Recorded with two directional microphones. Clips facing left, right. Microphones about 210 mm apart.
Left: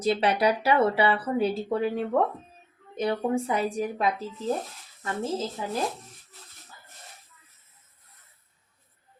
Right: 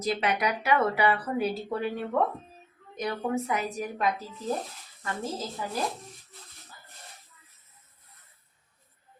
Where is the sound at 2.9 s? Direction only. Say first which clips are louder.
Left 4 dB; 30° left (ahead or behind).